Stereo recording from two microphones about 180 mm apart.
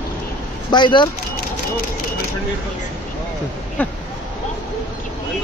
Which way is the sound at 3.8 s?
10° left (ahead or behind).